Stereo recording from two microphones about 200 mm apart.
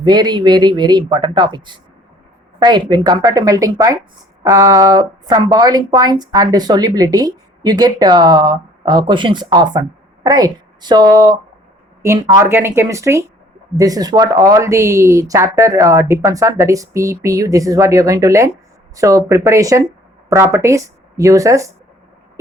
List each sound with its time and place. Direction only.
0.0 s a woman's voice: 20° right (ahead or behind)